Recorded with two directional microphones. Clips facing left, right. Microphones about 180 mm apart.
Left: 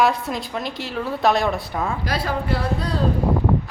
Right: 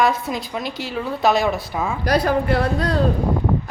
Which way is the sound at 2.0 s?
45° right (ahead or behind).